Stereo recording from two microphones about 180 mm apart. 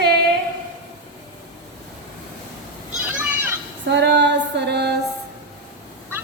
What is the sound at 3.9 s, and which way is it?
Female singing, 75° right (ahead or behind).